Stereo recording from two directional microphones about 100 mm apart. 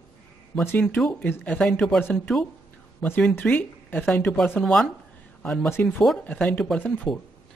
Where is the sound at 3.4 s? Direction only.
15° left (ahead or behind).